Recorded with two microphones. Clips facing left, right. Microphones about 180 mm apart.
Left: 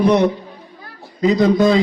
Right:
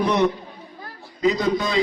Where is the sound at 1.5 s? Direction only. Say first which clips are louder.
Left 10 dB; 50° left (ahead or behind).